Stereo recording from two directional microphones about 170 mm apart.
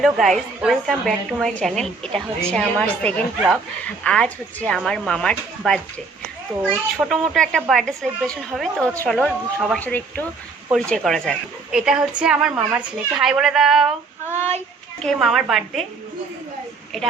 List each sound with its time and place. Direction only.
0.0 s a woman's voice: centre (ahead or behind)